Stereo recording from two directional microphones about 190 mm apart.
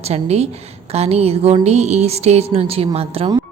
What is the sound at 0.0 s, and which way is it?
A woman's voice, 35° right (ahead or behind).